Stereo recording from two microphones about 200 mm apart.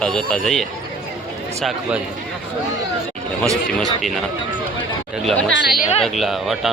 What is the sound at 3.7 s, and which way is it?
Speech, centre (ahead or behind).